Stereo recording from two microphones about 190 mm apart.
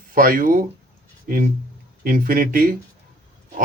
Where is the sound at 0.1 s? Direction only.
45° right (ahead or behind).